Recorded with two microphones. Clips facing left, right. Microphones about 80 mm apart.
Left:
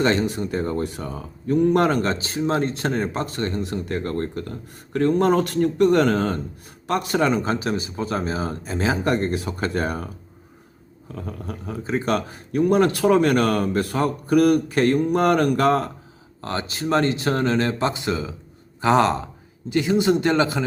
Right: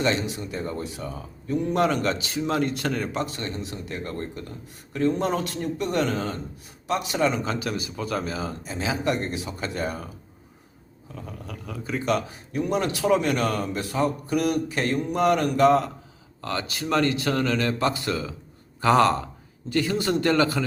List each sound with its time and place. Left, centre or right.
0.0 s speech: left
8.4 s speech: left
11.1 s speech: left
12.1 s speech: left
16.4 s speech: left